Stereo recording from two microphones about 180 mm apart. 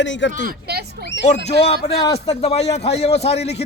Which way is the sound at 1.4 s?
35° left (ahead or behind).